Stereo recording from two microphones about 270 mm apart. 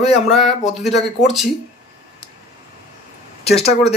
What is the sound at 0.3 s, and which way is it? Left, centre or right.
Speech, centre.